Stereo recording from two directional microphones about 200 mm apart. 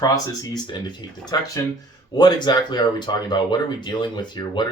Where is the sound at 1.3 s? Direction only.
20° left (ahead or behind).